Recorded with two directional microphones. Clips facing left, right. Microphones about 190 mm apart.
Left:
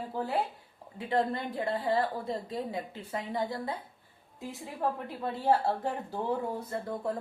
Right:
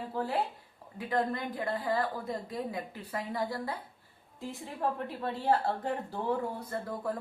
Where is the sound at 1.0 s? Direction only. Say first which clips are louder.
Left 2 dB; 30° left (ahead or behind).